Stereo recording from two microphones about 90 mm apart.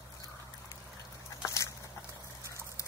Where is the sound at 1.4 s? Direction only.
35° left (ahead or behind).